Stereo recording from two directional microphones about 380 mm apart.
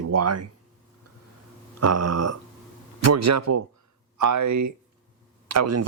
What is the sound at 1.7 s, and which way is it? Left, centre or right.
Speech, right.